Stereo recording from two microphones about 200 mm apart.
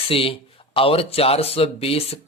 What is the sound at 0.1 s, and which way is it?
Speech, 25° left (ahead or behind).